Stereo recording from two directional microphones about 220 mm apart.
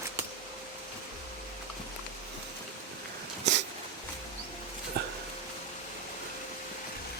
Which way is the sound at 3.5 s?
55° right (ahead or behind).